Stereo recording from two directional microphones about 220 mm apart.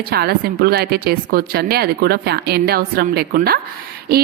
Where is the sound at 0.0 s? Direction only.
45° right (ahead or behind).